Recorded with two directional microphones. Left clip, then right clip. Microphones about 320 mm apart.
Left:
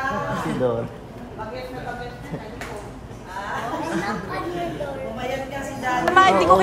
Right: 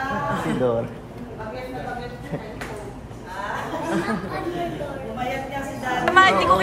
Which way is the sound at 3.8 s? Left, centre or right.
Centre.